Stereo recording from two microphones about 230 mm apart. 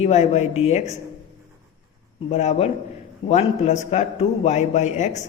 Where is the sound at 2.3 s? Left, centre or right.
Left.